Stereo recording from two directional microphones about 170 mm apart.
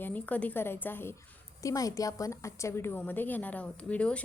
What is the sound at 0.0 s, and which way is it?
A woman's voice, 10° left (ahead or behind).